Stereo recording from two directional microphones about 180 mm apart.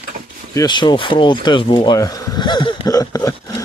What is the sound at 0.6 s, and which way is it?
Speech, 25° left (ahead or behind).